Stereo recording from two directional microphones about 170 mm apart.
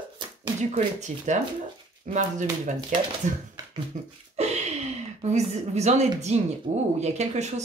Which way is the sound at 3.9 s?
50° right (ahead or behind).